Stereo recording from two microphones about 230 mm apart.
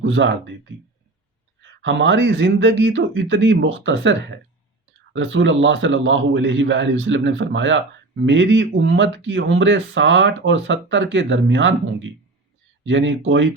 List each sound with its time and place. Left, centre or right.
0.0 s a man's voice: right
1.8 s a man's voice: right